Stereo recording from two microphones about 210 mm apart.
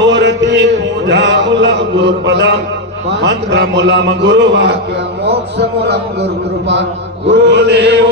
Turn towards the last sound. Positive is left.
turn(degrees=-55)  # may be behind; listen again after turning